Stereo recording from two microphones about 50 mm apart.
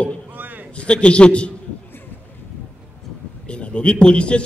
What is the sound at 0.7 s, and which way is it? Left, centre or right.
Speech, left.